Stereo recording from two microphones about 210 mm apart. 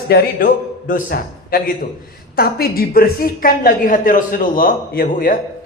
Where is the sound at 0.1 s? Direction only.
45° left (ahead or behind).